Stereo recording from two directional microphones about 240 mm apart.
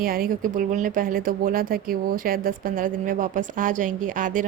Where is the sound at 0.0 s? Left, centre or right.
Right.